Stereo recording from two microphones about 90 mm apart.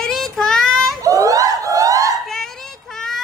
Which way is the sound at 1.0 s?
40° right (ahead or behind).